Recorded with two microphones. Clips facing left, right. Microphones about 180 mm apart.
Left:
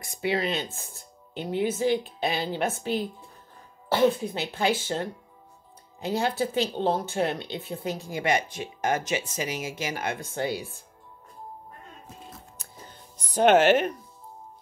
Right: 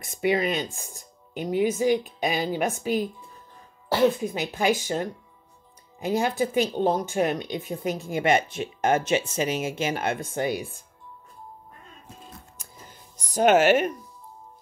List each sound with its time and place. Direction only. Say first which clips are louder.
0.2 s speech: right 3 dB; 15° right (ahead or behind)
4.2 s speech: right 2 dB; 15° right (ahead or behind)
13.4 s speech: even; 5° right (ahead or behind)